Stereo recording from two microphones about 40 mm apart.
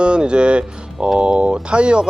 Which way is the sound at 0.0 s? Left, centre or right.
Right.